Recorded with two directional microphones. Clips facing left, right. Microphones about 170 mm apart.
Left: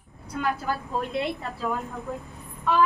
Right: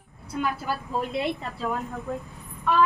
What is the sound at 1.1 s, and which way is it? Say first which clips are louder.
Speech: right 1 dB; 5° right (ahead or behind).